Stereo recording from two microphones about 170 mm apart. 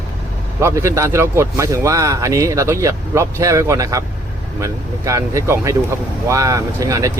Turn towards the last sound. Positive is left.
turn(degrees=-20)  # may be behind; listen again after turning